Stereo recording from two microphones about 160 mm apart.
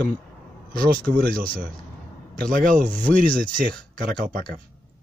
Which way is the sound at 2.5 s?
55° right (ahead or behind).